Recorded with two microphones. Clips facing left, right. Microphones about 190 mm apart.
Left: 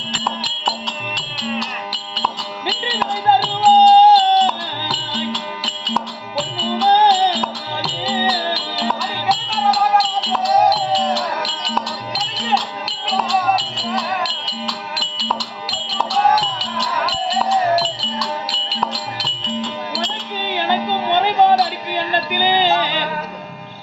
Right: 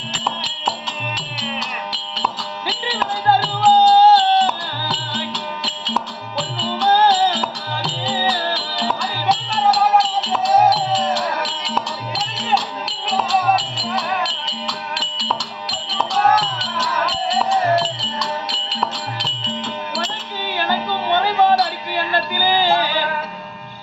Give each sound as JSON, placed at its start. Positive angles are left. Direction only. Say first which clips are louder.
{"t": 0.1, "sound": "music", "louder": "left 2 dB", "side_deg": -5}
{"t": 3.7, "sound": "music", "louder": "left 2 dB", "side_deg": 20}
{"t": 4.4, "sound": "music", "louder": "left 1 dB", "side_deg": 0}
{"t": 6.8, "sound": "music", "louder": "left 1 dB", "side_deg": 15}
{"t": 7.3, "sound": "music", "louder": "left 1 dB", "side_deg": 0}
{"t": 20.4, "sound": "music", "louder": "left 2 dB", "side_deg": 20}